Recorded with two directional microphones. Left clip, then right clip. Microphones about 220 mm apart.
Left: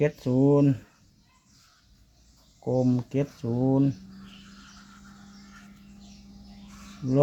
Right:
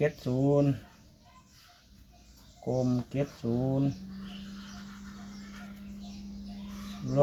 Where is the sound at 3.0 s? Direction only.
45° left (ahead or behind).